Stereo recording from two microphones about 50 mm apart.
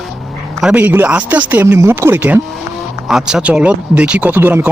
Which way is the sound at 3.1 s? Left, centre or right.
Centre.